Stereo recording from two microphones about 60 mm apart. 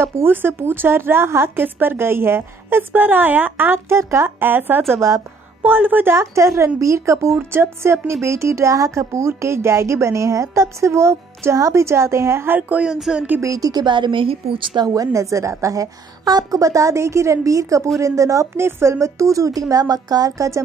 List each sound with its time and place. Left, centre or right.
0.0 s a woman's voice: right
3.9 s a woman's voice: right
4.4 s a woman's voice: right
4.9 s a woman's voice: right
5.6 s a woman's voice: right
6.1 s a woman's voice: right
7.5 s a woman's voice: right
8.2 s a woman's voice: right
12.4 s speech: right
12.8 s speech: centre
13.4 s speech: right
15.0 s a woman's voice: right
19.7 s a woman's voice: right